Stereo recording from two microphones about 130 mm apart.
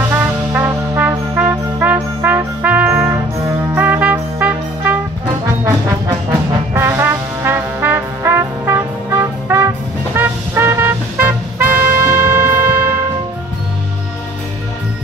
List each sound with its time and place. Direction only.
0.1 s brass instrument: 15° right (ahead or behind)
3.7 s music: 15° right (ahead or behind)
6.7 s trombone: 20° right (ahead or behind)
10.1 s vehicle: 20° right (ahead or behind)